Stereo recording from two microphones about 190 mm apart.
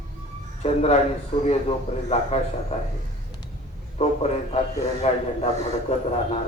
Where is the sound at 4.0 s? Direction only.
35° left (ahead or behind).